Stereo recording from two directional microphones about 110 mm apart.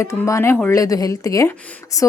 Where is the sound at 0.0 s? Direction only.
30° left (ahead or behind).